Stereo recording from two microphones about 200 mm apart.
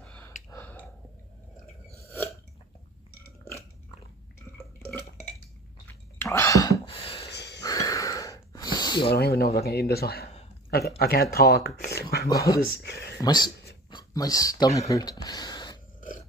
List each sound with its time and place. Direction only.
0.0 s a sound: 5° left (ahead or behind)
4.8 s dishes: 5° left (ahead or behind)
6.1 s whispering: 15° left (ahead or behind)
6.9 s a sound: 25° left (ahead or behind)
7.2 s wheeze: 55° left (ahead or behind)
7.6 s a sound: 15° left (ahead or behind)
9.1 s speech: 50° left (ahead or behind)
12.3 s speech: 15° left (ahead or behind)
12.5 s speech: 50° left (ahead or behind)
13.2 s speech: 20° left (ahead or behind)